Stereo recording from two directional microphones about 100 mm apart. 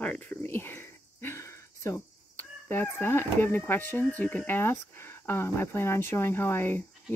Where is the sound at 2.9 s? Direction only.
20° left (ahead or behind).